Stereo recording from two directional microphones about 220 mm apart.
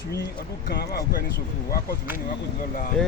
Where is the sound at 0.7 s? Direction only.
45° left (ahead or behind).